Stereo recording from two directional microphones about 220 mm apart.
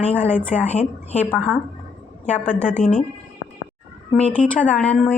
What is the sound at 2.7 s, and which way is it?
Speech, 30° left (ahead or behind).